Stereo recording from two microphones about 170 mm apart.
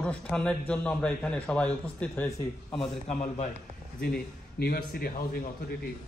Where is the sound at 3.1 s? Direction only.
40° left (ahead or behind).